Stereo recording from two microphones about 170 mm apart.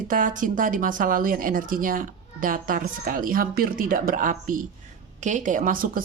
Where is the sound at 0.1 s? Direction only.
50° right (ahead or behind).